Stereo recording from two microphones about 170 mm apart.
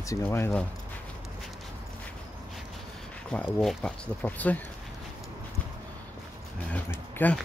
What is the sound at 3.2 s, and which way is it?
Speech, 5° left (ahead or behind).